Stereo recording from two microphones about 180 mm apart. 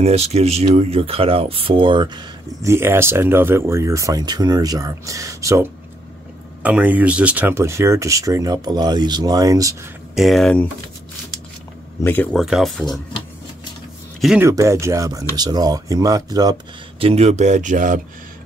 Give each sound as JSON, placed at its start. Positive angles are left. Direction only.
{"t": 0.0, "sound": "speech", "side_deg": -35}
{"t": 10.1, "sound": "speech", "side_deg": 0}
{"t": 12.0, "sound": "speech", "side_deg": 10}
{"t": 12.4, "sound": "speech", "side_deg": 0}
{"t": 14.4, "sound": "speech", "side_deg": -15}
{"t": 17.0, "sound": "speech", "side_deg": -35}